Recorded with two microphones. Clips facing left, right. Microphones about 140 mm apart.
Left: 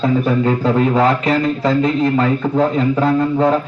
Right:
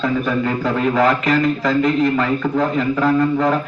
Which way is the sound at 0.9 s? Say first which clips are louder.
Left 1 dB; 30° left (ahead or behind).